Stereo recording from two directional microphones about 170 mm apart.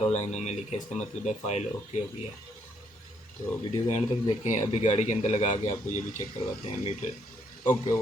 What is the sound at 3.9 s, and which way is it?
A man's voice, 40° left (ahead or behind).